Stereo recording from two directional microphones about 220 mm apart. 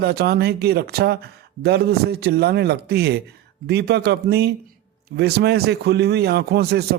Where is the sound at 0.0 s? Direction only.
45° right (ahead or behind).